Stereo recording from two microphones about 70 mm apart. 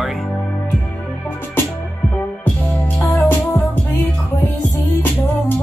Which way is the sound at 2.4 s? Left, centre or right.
Left.